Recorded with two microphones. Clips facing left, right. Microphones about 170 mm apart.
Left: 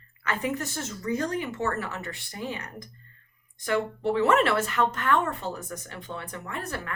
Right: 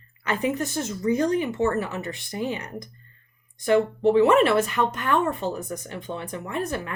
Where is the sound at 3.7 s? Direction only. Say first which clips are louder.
Right 7 dB; 20° right (ahead or behind).